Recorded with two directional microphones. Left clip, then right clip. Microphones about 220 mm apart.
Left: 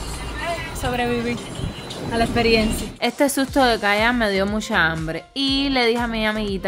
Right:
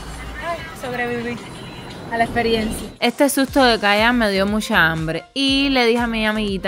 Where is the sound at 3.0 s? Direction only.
15° right (ahead or behind).